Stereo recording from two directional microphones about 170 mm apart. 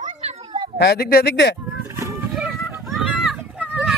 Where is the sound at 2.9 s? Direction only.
Centre (ahead or behind).